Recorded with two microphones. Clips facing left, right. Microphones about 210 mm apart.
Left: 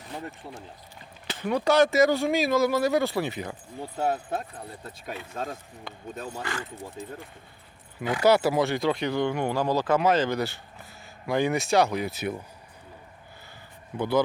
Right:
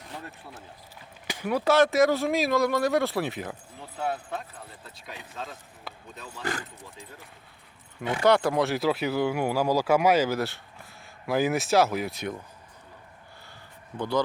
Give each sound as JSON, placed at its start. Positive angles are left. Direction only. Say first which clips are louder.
{"t": 1.3, "sound": "speech", "louder": "even", "side_deg": -10}
{"t": 3.8, "sound": "speech", "louder": "left 4 dB", "side_deg": 40}
{"t": 5.9, "sound": "speech", "louder": "even", "side_deg": -5}
{"t": 6.4, "sound": "speech", "louder": "right 5 dB", "side_deg": -40}
{"t": 8.2, "sound": "speech", "louder": "left 1 dB", "side_deg": 5}
{"t": 13.9, "sound": "speech", "louder": "left 3 dB", "side_deg": 10}